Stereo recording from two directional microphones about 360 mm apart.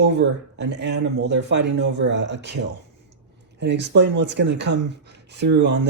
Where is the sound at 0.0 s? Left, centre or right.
Right.